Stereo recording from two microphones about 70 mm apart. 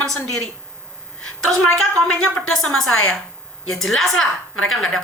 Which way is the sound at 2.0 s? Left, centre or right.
Centre.